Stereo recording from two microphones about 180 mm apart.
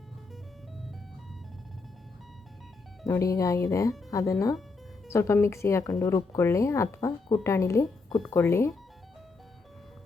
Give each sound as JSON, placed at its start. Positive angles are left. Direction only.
{"t": 3.1, "sound": "speech", "side_deg": 20}